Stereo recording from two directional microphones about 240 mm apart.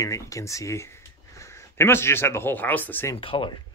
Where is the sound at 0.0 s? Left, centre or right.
Centre.